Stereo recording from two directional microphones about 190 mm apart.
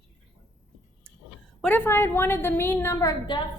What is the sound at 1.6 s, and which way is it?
A woman's voice, 10° left (ahead or behind).